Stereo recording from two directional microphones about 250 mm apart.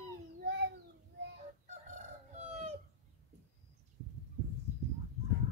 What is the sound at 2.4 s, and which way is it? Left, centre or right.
Chicken, right.